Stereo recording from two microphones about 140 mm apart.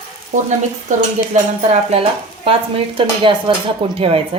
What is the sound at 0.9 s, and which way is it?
Cutlery, 60° right (ahead or behind).